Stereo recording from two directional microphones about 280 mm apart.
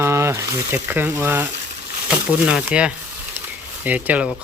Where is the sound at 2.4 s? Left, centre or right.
Centre.